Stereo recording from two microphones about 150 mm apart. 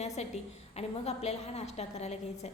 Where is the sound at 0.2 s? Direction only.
45° left (ahead or behind).